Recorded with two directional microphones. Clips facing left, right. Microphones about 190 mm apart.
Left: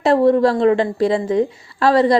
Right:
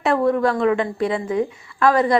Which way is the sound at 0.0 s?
35° left (ahead or behind).